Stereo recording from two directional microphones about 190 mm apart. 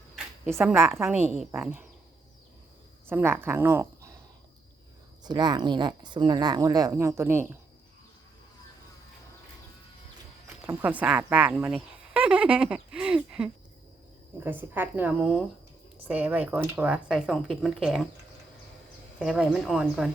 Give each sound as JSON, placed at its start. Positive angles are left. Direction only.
{"t": 0.4, "sound": "speech", "side_deg": -10}
{"t": 3.1, "sound": "speech", "side_deg": -10}
{"t": 5.2, "sound": "speech", "side_deg": -20}
{"t": 10.7, "sound": "speech", "side_deg": -10}
{"t": 19.2, "sound": "speech", "side_deg": -5}